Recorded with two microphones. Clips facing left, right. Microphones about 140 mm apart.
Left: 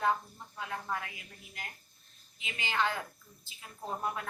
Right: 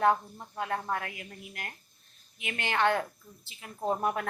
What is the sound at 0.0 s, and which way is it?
Speech, 60° right (ahead or behind).